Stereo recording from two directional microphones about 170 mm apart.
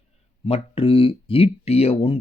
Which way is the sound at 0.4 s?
35° left (ahead or behind).